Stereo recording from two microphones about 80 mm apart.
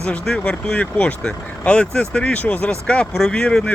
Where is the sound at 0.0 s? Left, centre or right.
Centre.